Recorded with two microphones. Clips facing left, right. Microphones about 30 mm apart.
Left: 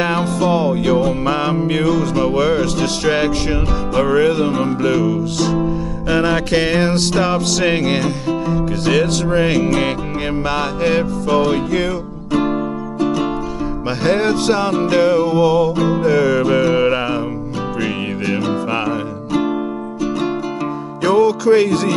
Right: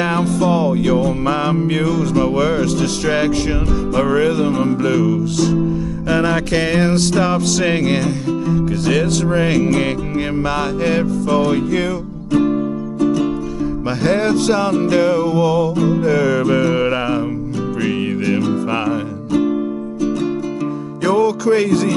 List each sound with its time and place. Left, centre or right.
0.0 s music: centre
6.0 s music: centre
12.3 s music: left
14.0 s music: centre
19.3 s music: left
21.0 s music: left